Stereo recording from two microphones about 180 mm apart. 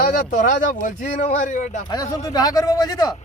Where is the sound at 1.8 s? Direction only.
20° left (ahead or behind).